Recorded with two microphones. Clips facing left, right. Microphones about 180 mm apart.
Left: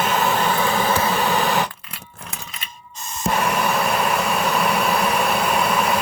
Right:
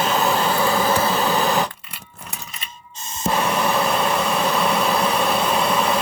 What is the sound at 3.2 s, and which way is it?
Vehicle, 30° right (ahead or behind).